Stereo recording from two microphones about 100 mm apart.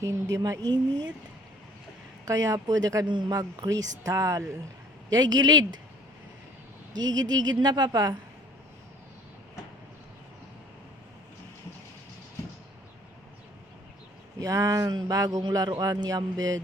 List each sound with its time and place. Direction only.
0.0 s a man's voice: 35° right (ahead or behind)
2.2 s a man's voice: 35° right (ahead or behind)
3.1 s a man's voice: 50° right (ahead or behind)
6.9 s a man's voice: 45° right (ahead or behind)
14.3 s a man's voice: 35° right (ahead or behind)